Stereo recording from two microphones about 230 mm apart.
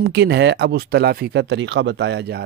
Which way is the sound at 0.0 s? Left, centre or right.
Right.